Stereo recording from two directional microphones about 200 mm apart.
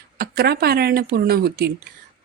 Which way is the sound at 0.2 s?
50° right (ahead or behind).